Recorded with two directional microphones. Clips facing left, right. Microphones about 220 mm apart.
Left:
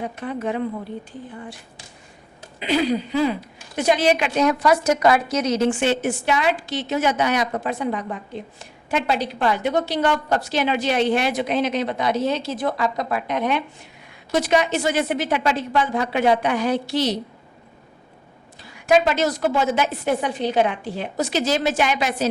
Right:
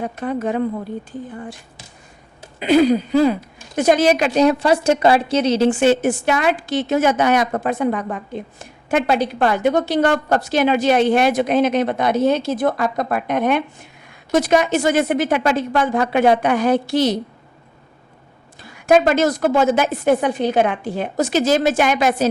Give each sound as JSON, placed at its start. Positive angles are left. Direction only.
{"t": 0.0, "sound": "a woman's voice", "side_deg": -45}
{"t": 2.6, "sound": "a woman's voice", "side_deg": -45}
{"t": 18.6, "sound": "a woman's voice", "side_deg": -50}